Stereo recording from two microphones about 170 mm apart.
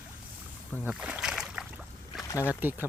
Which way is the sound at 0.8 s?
5° right (ahead or behind).